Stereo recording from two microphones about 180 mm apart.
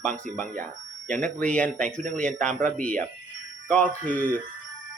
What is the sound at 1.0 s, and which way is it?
Speech, 45° right (ahead or behind).